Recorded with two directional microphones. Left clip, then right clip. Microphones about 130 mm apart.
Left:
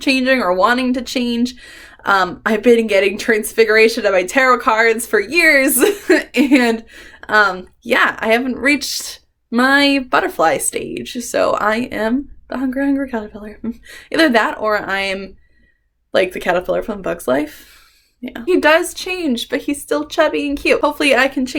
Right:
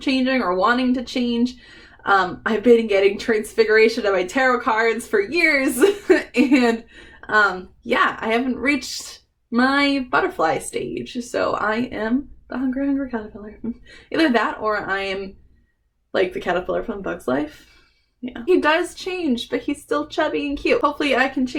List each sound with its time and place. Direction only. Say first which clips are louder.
0.0 s a woman's voice: left 6 dB; 25° left (ahead or behind)
7.9 s a woman's voice: left 5 dB; 20° left (ahead or behind)